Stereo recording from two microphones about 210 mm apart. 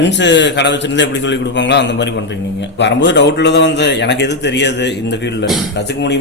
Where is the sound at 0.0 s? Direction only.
55° left (ahead or behind).